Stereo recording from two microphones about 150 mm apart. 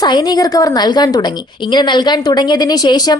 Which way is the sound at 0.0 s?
25° left (ahead or behind).